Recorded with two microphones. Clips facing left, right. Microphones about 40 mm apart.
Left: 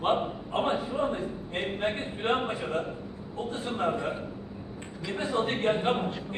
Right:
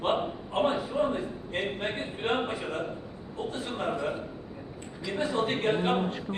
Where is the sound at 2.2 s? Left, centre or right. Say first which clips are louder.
Left 1 dB; left.